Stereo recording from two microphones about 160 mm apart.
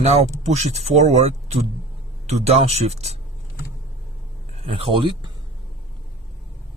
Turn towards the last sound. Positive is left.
turn(degrees=-30)  # may be behind; listen again after turning